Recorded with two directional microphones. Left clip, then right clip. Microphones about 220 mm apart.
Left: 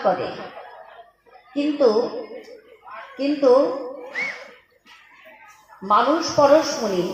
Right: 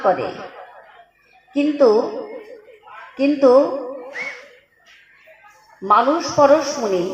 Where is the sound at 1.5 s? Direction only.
35° right (ahead or behind).